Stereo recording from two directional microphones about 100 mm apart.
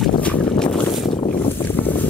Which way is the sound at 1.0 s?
55° left (ahead or behind).